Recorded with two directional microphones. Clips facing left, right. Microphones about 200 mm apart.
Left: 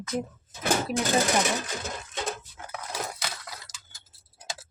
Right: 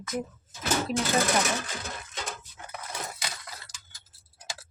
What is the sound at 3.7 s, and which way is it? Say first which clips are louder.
Tick-tock: left 1 dB; 45° left (ahead or behind).